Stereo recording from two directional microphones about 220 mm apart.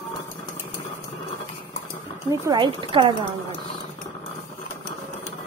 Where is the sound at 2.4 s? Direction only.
20° right (ahead or behind).